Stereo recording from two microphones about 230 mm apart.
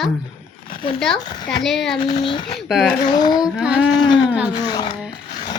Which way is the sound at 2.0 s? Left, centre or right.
Left.